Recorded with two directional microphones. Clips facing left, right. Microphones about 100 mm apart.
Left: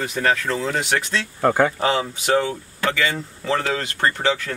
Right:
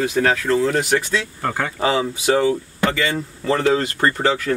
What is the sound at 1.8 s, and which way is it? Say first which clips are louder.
Speech: right 2 dB; 5° right (ahead or behind).